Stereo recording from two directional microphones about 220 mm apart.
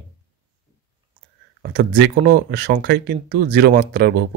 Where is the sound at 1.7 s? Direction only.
45° right (ahead or behind).